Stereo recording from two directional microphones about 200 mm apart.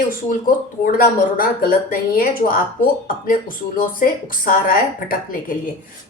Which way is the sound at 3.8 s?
45° left (ahead or behind).